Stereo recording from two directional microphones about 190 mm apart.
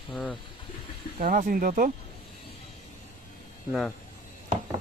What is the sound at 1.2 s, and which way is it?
Speech, 45° right (ahead or behind).